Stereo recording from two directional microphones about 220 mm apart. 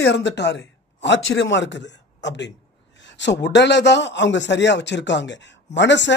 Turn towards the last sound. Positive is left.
turn(degrees=55)  # may be behind; listen again after turning